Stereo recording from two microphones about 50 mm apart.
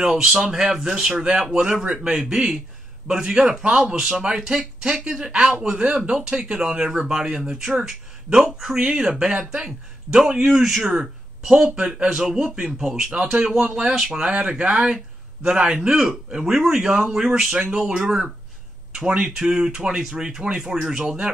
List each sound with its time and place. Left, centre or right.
0.0 s speech: centre
14.3 s speech: right